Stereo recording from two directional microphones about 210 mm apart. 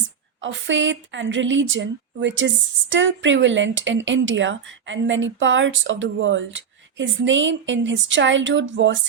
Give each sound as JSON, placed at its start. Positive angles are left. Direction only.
{"t": 0.4, "sound": "speech", "side_deg": -60}